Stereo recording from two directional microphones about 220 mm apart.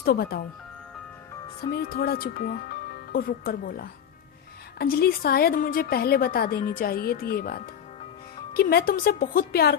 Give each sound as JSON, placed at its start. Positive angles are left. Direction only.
{"t": 0.0, "sound": "a woman's voice", "side_deg": 45}
{"t": 1.7, "sound": "a woman's voice", "side_deg": 45}